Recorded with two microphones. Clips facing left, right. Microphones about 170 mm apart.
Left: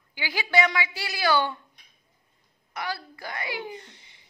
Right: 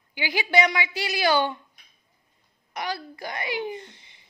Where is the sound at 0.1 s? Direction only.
15° right (ahead or behind).